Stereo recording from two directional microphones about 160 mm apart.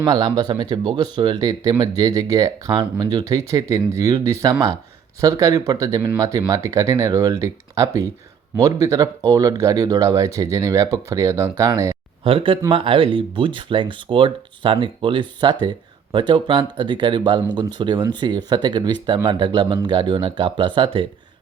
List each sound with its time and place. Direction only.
0.0 s speech: 25° right (ahead or behind)
12.2 s speech: 35° right (ahead or behind)